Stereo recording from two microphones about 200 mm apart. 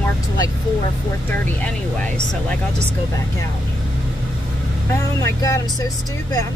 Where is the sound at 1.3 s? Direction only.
10° left (ahead or behind).